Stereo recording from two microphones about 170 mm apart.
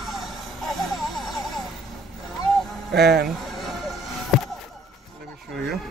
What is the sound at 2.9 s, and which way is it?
Speech, 75° right (ahead or behind).